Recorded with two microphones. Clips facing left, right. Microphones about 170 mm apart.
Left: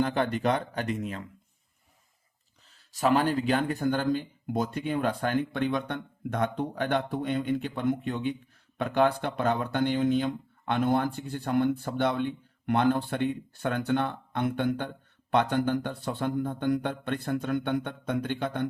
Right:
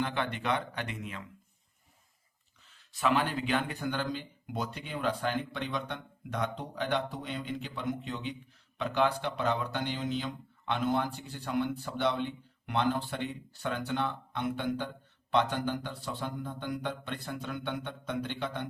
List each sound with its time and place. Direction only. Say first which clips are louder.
0.0 s speech: left 7 dB; 40° left (ahead or behind)
2.6 s speech: left 4 dB; 40° left (ahead or behind)